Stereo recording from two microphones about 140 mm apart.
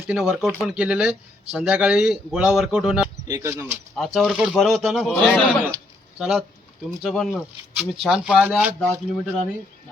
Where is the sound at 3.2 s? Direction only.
20° right (ahead or behind).